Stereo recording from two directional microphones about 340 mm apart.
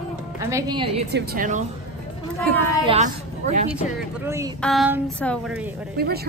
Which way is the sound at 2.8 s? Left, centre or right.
Centre.